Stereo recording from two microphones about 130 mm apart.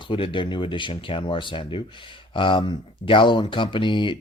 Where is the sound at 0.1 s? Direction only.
40° left (ahead or behind).